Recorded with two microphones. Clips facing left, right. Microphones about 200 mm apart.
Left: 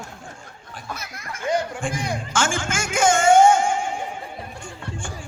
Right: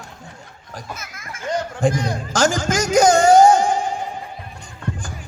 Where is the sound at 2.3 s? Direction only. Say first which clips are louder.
Right 7 dB; 40° right (ahead or behind).